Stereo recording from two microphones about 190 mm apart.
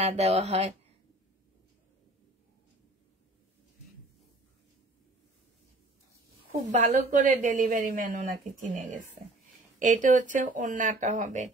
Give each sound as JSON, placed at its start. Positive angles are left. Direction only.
{"t": 0.0, "sound": "speech", "side_deg": -35}
{"t": 6.7, "sound": "a woman's voice", "side_deg": -40}